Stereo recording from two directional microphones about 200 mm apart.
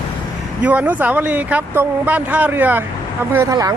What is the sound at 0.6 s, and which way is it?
Speech, 5° right (ahead or behind).